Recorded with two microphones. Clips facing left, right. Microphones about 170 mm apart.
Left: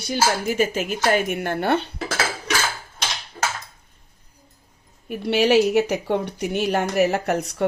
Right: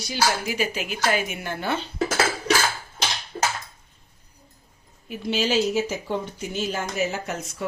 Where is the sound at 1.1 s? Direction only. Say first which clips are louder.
Left 6 dB; 60° left (ahead or behind).